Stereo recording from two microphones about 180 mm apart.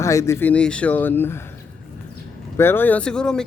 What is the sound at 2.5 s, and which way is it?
Speech, 10° left (ahead or behind).